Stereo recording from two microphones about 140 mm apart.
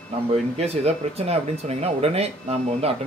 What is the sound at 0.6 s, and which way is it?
Speech, 50° right (ahead or behind).